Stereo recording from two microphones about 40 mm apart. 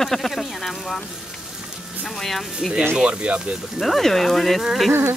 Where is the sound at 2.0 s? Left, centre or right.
Centre.